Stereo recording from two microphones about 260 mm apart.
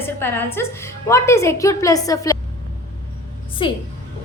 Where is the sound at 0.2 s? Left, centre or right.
Centre.